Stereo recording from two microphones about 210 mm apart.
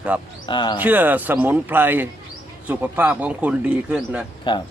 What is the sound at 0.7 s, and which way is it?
Speech, 10° right (ahead or behind).